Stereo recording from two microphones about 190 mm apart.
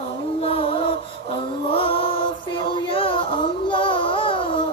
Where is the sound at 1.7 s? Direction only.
30° left (ahead or behind).